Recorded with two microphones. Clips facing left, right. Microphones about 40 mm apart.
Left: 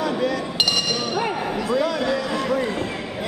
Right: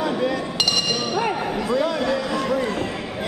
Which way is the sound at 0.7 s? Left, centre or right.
Centre.